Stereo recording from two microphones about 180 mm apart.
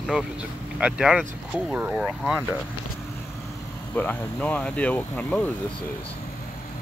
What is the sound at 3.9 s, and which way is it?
Speech, 10° left (ahead or behind).